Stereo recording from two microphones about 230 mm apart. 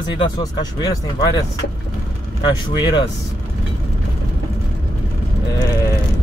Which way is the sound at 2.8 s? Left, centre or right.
Centre.